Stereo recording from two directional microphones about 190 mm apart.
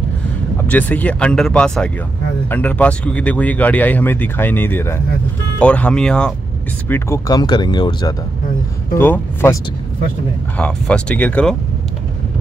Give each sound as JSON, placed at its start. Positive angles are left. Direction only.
{"t": 0.7, "sound": "speech", "side_deg": 10}
{"t": 6.9, "sound": "speech", "side_deg": 15}
{"t": 9.0, "sound": "speech", "side_deg": 10}
{"t": 10.6, "sound": "speech", "side_deg": 5}